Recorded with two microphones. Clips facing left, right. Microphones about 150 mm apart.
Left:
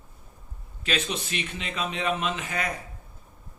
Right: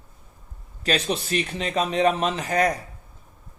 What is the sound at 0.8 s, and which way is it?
Speech, 40° right (ahead or behind).